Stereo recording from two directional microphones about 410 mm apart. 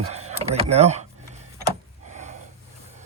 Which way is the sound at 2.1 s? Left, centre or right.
Centre.